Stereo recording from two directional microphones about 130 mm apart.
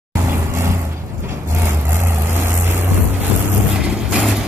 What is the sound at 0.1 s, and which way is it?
Vehicle, 20° right (ahead or behind).